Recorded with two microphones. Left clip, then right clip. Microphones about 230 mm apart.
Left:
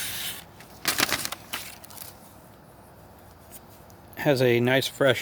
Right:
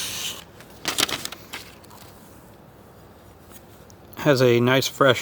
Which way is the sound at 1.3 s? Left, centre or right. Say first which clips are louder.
Left 2 dB; left.